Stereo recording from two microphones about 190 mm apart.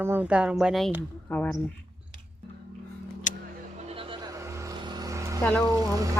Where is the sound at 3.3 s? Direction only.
40° left (ahead or behind).